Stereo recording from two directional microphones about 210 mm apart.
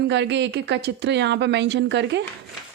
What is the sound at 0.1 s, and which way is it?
A woman's voice, 55° right (ahead or behind).